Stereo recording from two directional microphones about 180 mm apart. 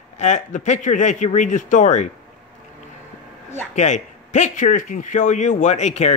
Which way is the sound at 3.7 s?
40° left (ahead or behind).